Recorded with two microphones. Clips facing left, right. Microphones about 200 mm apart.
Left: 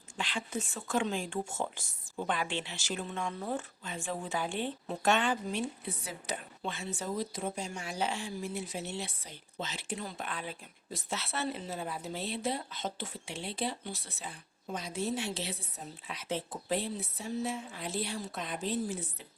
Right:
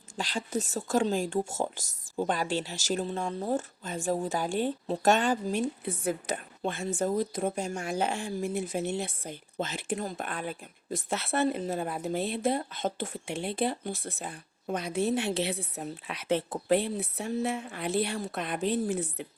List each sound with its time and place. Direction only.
0.2 s speech: 40° right (ahead or behind); by 19.3 s 60° right (ahead or behind)